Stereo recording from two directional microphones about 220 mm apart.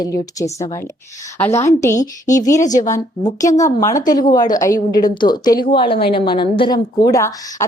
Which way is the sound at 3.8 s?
15° left (ahead or behind).